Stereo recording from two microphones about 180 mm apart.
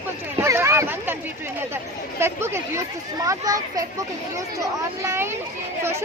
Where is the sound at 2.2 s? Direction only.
15° right (ahead or behind).